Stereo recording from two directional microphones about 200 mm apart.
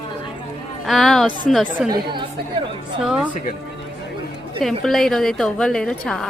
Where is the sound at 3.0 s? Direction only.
5° right (ahead or behind).